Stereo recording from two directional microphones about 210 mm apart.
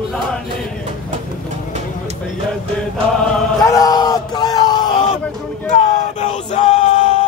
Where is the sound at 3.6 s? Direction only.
15° left (ahead or behind).